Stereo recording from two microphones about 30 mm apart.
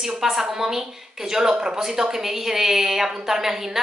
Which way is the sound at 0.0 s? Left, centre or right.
Centre.